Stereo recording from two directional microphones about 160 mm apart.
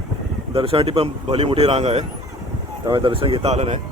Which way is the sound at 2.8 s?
30° right (ahead or behind).